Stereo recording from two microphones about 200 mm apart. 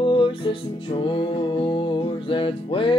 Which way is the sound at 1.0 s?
25° left (ahead or behind).